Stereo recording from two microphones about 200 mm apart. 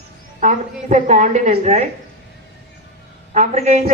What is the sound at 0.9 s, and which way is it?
Speech, 35° right (ahead or behind).